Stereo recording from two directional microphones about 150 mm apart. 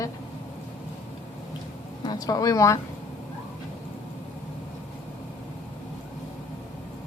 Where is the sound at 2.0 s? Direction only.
25° left (ahead or behind).